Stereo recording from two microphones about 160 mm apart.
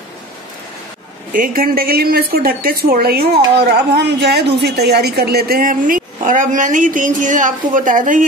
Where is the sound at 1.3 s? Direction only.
60° right (ahead or behind).